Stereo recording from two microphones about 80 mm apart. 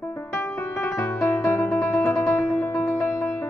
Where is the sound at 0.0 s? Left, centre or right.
Left.